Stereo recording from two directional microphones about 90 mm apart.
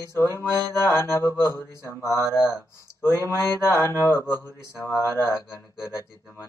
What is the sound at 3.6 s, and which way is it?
Mantra, 30° left (ahead or behind).